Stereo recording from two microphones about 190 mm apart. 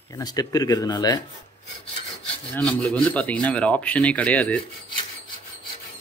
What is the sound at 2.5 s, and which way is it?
A man's voice, 5° left (ahead or behind).